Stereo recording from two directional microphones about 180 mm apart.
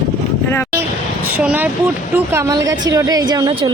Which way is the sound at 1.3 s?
10° right (ahead or behind).